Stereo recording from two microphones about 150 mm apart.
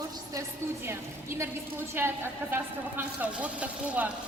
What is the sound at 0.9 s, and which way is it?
A woman's voice, 15° right (ahead or behind).